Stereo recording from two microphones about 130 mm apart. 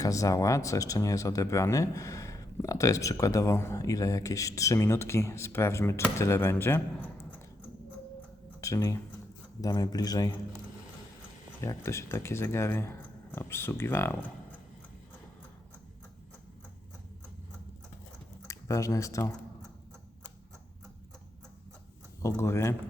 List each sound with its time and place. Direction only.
0.0 s speech: 25° left (ahead or behind)
8.6 s speech: 25° left (ahead or behind)
11.6 s speech: 20° left (ahead or behind)
18.4 s speech: 25° left (ahead or behind)
22.2 s speech: 25° left (ahead or behind)